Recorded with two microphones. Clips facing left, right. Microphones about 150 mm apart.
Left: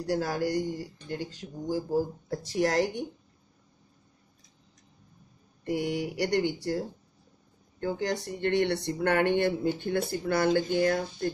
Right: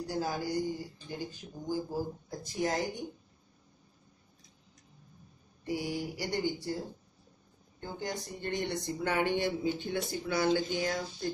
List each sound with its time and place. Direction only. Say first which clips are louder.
0.0 s speech: left 5 dB; 80° left
5.7 s speech: left 5 dB; 65° left (ahead or behind)
7.8 s speech: left 8 dB; 75° left (ahead or behind); by 11.2 s 55° left (ahead or behind)